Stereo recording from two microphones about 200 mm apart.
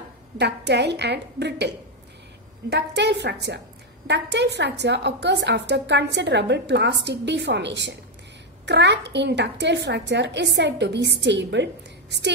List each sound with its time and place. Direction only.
0.4 s a woman's voice: 55° right (ahead or behind)
2.7 s a woman's voice: 60° right (ahead or behind)